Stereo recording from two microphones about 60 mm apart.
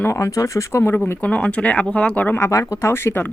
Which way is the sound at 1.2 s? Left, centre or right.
Left.